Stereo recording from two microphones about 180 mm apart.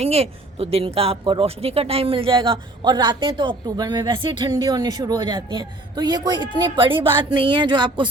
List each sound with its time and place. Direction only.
0.0 s speech: 35° right (ahead or behind)